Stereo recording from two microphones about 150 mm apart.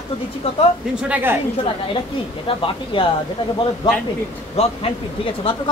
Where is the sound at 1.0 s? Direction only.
10° right (ahead or behind).